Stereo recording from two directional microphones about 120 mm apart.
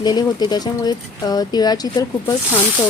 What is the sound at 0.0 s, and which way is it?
Speech, 35° left (ahead or behind).